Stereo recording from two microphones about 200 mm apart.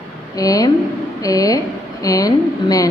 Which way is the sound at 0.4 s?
20° left (ahead or behind).